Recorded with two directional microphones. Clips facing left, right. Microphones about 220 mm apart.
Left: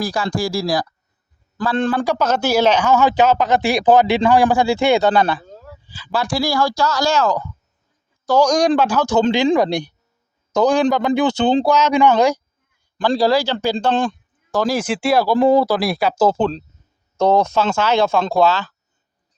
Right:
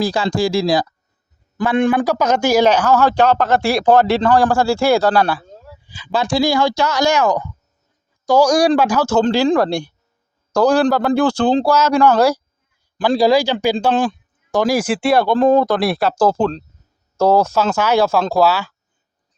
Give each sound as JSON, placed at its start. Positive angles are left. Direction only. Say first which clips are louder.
{"t": 0.0, "sound": "speech", "louder": "right 4 dB", "side_deg": -25}
{"t": 1.5, "sound": "speech", "louder": "right 3 dB", "side_deg": -15}
{"t": 5.8, "sound": "speech", "louder": "right 2 dB", "side_deg": -15}
{"t": 9.6, "sound": "speech", "louder": "even", "side_deg": 20}
{"t": 10.5, "sound": "speech", "louder": "right 1 dB", "side_deg": 0}